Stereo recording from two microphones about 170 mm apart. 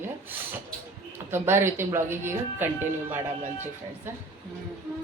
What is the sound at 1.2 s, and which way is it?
Speech, 15° right (ahead or behind).